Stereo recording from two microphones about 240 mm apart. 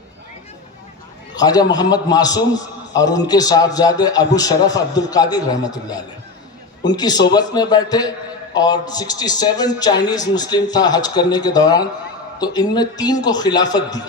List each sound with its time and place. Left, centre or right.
1.4 s speech: centre